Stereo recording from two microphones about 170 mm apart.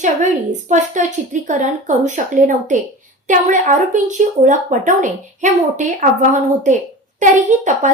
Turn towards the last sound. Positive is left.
turn(degrees=-45)  # may be behind; listen again after turning